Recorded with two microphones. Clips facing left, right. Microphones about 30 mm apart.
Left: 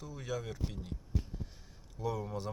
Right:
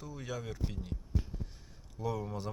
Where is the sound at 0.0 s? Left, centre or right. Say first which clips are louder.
Left 1 dB; centre.